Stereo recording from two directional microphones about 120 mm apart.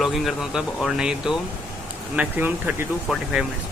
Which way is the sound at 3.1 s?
Centre (ahead or behind).